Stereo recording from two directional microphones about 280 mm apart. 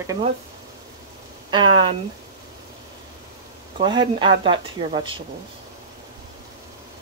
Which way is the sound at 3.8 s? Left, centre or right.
Centre.